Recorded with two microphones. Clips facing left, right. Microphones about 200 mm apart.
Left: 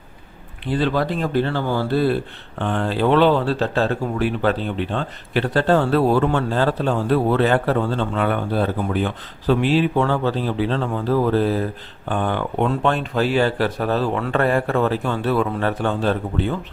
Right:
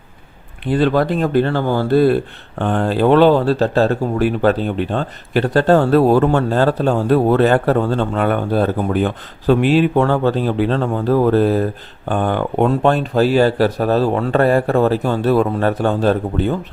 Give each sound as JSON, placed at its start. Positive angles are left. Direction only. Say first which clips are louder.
{"t": 0.6, "sound": "speech", "louder": "right 5 dB", "side_deg": -50}